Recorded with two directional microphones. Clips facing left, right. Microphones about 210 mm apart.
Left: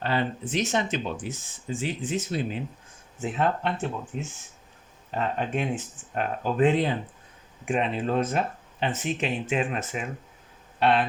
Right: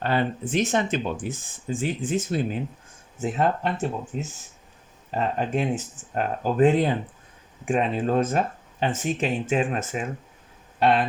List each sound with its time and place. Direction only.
0.0 s speech: 50° right (ahead or behind)